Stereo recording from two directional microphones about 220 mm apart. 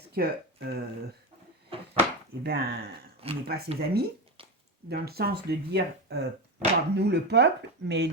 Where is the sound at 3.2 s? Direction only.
25° right (ahead or behind).